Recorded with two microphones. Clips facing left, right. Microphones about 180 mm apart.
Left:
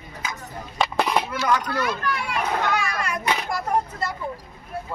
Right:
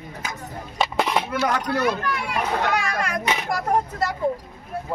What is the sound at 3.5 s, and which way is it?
Speech, 90° right.